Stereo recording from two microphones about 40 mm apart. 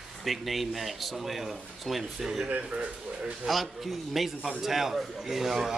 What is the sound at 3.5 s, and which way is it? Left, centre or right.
A man's voice, centre.